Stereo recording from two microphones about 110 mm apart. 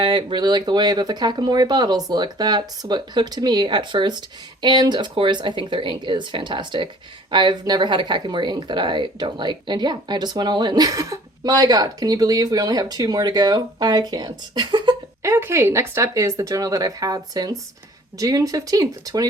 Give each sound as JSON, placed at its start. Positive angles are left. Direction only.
{"t": 0.0, "sound": "a woman's voice", "side_deg": -45}
{"t": 15.2, "sound": "speech", "side_deg": -25}